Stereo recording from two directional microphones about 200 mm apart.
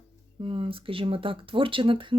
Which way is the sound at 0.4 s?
25° right (ahead or behind).